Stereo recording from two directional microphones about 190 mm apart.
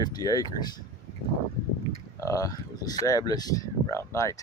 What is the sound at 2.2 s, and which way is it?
Speech, 15° left (ahead or behind).